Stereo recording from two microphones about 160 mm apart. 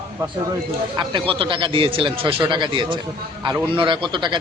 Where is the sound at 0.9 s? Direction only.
30° right (ahead or behind).